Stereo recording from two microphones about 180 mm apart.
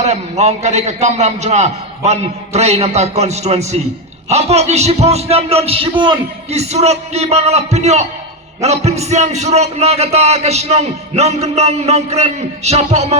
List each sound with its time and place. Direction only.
0.0 s a man's voice: 40° right (ahead or behind)